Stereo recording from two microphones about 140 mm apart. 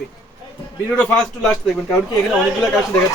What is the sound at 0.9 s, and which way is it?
Speech, 5° left (ahead or behind).